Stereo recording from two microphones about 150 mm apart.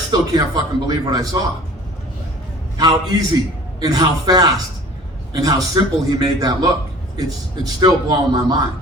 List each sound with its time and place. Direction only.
0.1 s a man's voice: 25° right (ahead or behind)
2.7 s a man's voice: 25° right (ahead or behind)